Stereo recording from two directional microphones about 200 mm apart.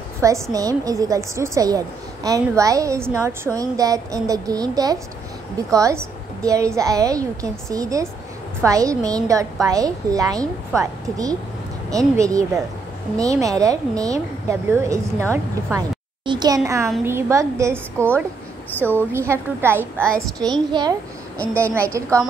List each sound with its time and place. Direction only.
0.2 s a woman's voice: 15° right (ahead or behind)
16.3 s a child's voice: 20° right (ahead or behind)
21.4 s a woman's voice: 5° left (ahead or behind)
21.7 s a woman's voice: 15° right (ahead or behind)